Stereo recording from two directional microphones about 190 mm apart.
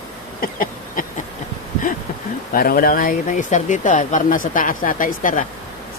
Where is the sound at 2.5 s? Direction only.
50° left (ahead or behind).